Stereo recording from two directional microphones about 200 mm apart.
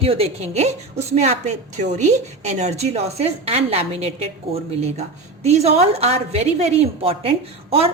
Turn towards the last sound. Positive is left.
turn(degrees=-30)  # may be behind; listen again after turning